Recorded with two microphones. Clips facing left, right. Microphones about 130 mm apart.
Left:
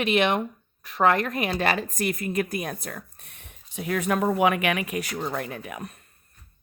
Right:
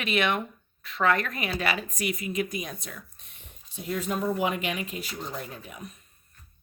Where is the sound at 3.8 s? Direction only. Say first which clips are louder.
Left 5 dB; 75° left (ahead or behind).